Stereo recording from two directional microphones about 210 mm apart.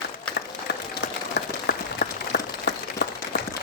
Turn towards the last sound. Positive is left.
turn(degrees=55)  # may be behind; listen again after turning